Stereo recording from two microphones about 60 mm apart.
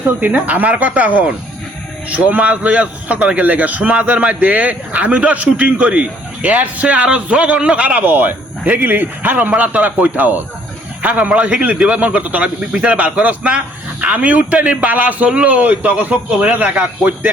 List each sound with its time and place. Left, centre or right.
0.2 s a man's voice: right